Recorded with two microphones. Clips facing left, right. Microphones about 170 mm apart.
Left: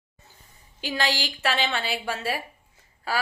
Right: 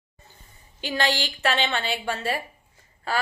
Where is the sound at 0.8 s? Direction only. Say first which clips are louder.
Right 2 dB; centre (ahead or behind).